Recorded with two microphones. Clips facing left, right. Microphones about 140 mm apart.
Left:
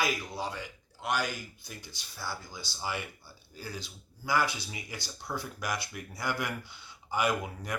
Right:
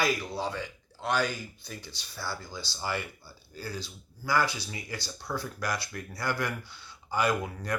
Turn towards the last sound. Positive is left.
turn(degrees=20)  # may be behind; listen again after turning